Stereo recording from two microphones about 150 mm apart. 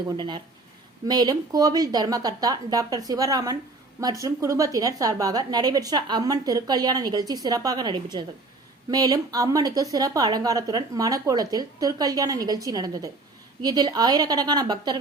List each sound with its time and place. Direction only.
0.2 s a woman's voice: 30° right (ahead or behind)